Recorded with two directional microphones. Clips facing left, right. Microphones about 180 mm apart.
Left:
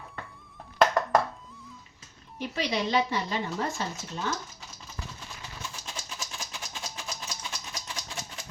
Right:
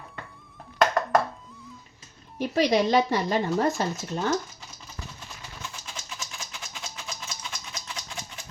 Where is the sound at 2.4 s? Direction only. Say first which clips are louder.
Right 8 dB; 40° right (ahead or behind).